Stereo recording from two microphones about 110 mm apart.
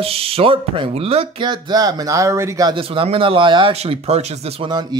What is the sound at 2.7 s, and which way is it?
Speech, 55° right (ahead or behind).